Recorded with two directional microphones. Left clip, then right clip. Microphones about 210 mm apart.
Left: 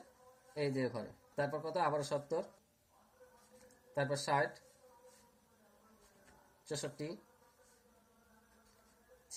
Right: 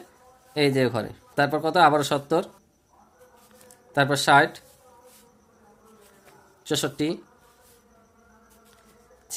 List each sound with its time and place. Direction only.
0.5 s speech: 50° right (ahead or behind)
3.9 s speech: 50° right (ahead or behind)
6.7 s speech: 50° right (ahead or behind)